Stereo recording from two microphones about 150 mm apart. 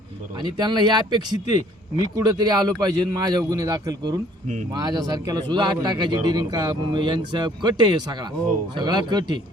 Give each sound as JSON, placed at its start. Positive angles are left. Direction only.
{"t": 0.6, "sound": "speech", "side_deg": -30}